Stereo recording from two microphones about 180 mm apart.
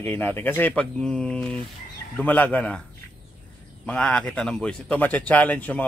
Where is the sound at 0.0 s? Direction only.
10° left (ahead or behind).